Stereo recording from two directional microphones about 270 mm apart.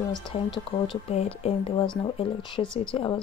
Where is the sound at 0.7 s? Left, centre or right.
Left.